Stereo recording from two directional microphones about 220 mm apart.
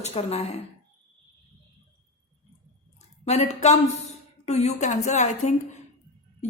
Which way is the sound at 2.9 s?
30° left (ahead or behind).